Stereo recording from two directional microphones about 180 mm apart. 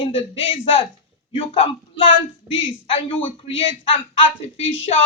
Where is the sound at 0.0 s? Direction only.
30° left (ahead or behind).